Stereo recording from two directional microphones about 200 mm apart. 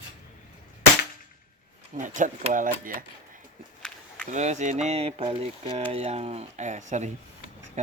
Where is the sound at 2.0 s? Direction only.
40° right (ahead or behind).